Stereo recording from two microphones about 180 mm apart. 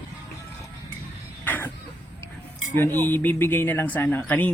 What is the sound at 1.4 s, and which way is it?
Vehicle, 10° left (ahead or behind).